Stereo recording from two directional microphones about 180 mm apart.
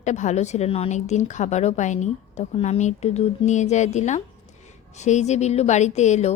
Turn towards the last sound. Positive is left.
turn(degrees=40)  # may be behind; listen again after turning